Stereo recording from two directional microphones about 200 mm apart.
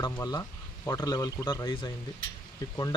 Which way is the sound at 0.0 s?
20° left (ahead or behind).